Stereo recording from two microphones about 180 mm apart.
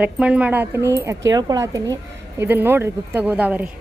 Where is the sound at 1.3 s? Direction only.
20° right (ahead or behind).